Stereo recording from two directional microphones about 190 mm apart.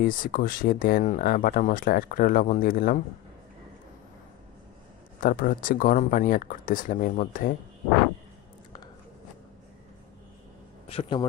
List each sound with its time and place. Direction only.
0.0 s speech: 45° left (ahead or behind)
5.2 s speech: 45° left (ahead or behind)
10.8 s a man's voice: 30° left (ahead or behind)